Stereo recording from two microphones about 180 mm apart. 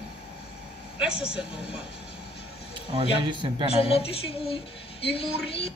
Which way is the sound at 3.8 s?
30° left (ahead or behind).